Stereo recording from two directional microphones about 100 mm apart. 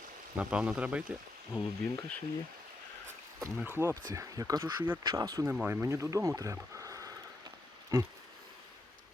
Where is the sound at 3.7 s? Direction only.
25° right (ahead or behind).